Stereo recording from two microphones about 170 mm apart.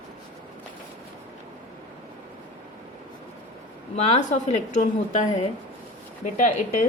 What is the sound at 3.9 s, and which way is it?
A woman's voice, 40° left (ahead or behind).